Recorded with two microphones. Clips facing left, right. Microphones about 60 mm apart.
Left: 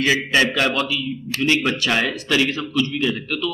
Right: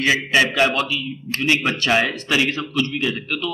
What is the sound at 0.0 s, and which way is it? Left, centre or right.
A man's voice, centre.